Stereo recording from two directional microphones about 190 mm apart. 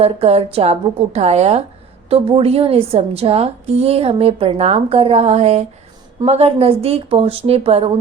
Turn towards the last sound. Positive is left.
turn(degrees=-30)  # may be behind; listen again after turning